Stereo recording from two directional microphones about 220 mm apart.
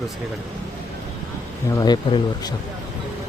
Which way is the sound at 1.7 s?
20° left (ahead or behind).